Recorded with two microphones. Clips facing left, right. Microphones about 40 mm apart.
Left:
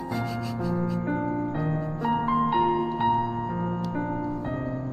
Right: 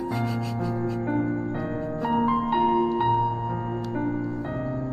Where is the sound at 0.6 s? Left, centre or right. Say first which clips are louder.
Left 1 dB; centre.